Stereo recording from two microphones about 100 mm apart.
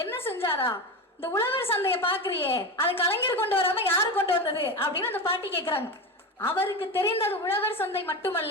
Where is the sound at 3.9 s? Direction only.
20° left (ahead or behind).